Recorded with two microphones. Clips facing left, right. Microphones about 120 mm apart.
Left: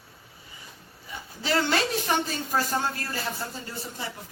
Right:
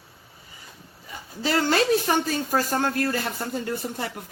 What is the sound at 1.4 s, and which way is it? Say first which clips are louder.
Speech: right 4 dB; 45° right (ahead or behind).